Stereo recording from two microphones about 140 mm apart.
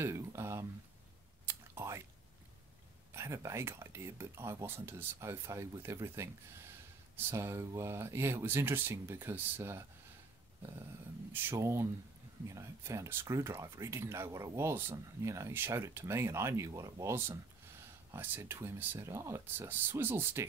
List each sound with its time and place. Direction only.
0.0 s speech: 20° right (ahead or behind)
1.4 s whispering: 15° right (ahead or behind)
3.1 s speech: 20° right (ahead or behind)
11.3 s speech: 15° right (ahead or behind)